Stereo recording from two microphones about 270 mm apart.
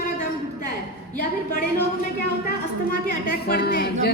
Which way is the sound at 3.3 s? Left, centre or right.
Left.